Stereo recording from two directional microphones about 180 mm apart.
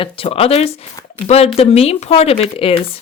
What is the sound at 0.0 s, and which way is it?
Speech, 30° left (ahead or behind).